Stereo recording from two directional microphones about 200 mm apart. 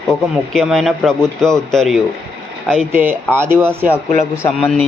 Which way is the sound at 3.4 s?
10° right (ahead or behind).